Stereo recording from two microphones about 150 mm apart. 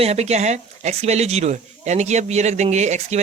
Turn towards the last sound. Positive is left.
turn(degrees=-50)  # may be behind; listen again after turning